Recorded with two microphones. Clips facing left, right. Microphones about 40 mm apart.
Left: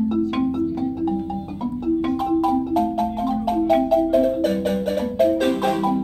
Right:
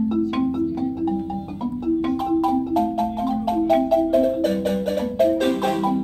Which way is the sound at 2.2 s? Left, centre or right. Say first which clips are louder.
Left 1 dB; centre.